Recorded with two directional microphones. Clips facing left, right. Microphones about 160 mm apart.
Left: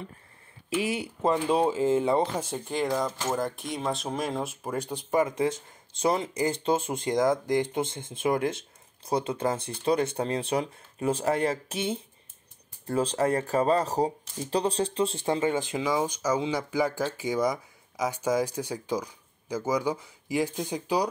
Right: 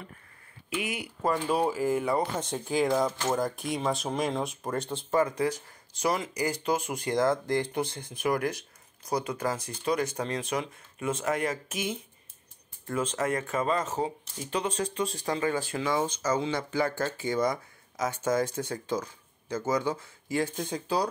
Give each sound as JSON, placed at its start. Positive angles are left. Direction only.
{"t": 0.7, "sound": "speech", "side_deg": 30}
{"t": 2.3, "sound": "speech", "side_deg": 5}